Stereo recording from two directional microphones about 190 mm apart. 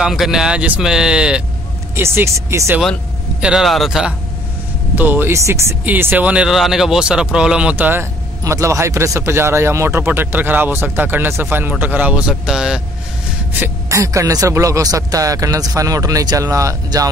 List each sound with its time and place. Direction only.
0.0 s speech: centre (ahead or behind)
2.8 s a man's voice: centre (ahead or behind)
13.6 s speech: 15° right (ahead or behind)